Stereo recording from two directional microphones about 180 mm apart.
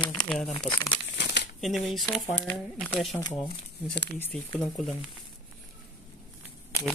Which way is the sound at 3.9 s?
70° left (ahead or behind).